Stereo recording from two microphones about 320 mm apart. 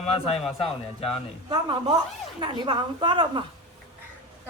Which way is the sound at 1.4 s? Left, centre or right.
Centre.